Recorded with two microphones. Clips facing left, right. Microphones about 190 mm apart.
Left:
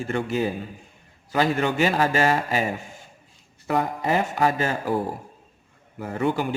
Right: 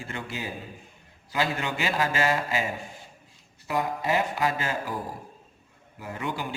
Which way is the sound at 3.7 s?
55° left (ahead or behind).